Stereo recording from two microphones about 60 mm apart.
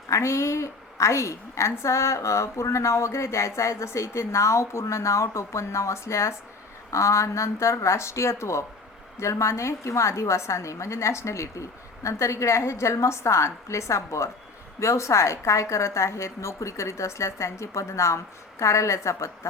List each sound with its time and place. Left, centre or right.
0.1 s a woman's voice: left